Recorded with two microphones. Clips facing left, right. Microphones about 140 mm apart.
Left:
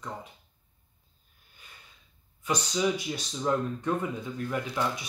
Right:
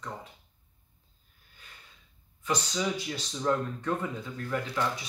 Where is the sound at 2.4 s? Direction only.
15° left (ahead or behind).